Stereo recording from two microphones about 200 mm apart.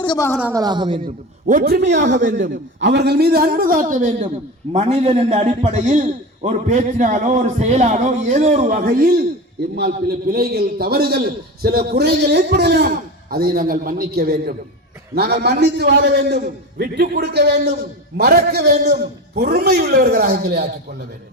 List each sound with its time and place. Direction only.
0.0 s a woman's voice: 20° left (ahead or behind)
0.3 s a woman's voice: 10° right (ahead or behind)
0.6 s a man's voice: 20° right (ahead or behind)
1.0 s a man's voice: 45° right (ahead or behind)